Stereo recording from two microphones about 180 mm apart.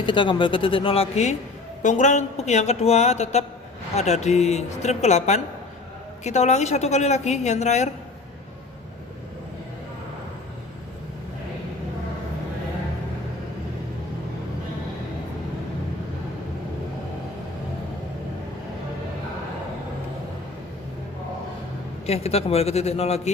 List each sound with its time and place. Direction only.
0.0 s a woman's voice: 25° left (ahead or behind)
22.0 s a woman's voice: 35° left (ahead or behind)